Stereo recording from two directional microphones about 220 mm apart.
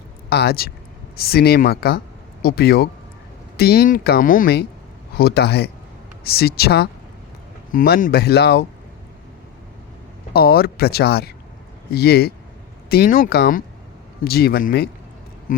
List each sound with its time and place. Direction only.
0.3 s speech: 45° left (ahead or behind)
10.3 s speech: 45° left (ahead or behind)